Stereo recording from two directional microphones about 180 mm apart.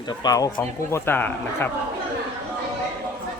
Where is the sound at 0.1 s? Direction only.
20° left (ahead or behind).